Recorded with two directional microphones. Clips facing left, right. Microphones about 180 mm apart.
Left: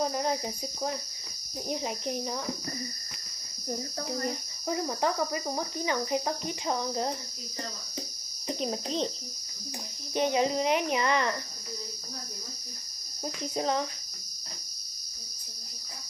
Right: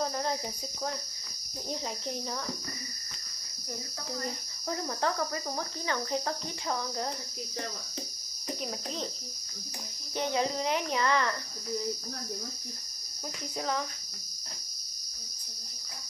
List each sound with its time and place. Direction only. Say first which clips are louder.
0.0 s cricket: left 3 dB; 15° left (ahead or behind)
1.7 s cricket: left 4 dB; 15° left (ahead or behind)
4.6 s cricket: left 3 dB; 15° left (ahead or behind)
8.5 s speech: left 5 dB; 25° left (ahead or behind)
10.1 s cricket: left 4 dB; 15° left (ahead or behind)
13.6 s speech: left 4 dB; 25° left (ahead or behind)